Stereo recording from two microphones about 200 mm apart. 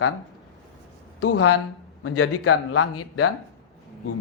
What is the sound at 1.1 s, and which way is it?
A woman's voice, 90° left.